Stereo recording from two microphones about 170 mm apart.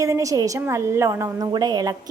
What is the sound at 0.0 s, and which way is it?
A woman's voice, 20° right (ahead or behind).